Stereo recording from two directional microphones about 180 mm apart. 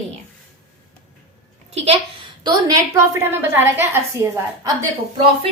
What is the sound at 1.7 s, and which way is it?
Speech, 35° right (ahead or behind).